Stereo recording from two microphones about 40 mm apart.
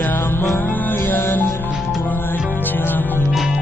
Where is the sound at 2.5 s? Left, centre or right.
Left.